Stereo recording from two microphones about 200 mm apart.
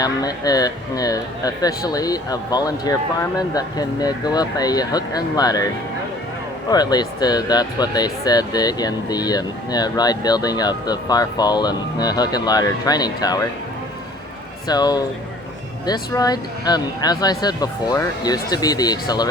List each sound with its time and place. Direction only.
0.0 s speech: 20° left (ahead or behind)
6.7 s speech: 20° left (ahead or behind)
14.7 s speech: 20° left (ahead or behind)